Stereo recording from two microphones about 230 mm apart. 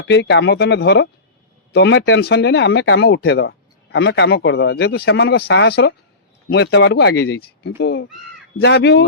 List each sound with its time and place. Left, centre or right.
0.1 s speech: left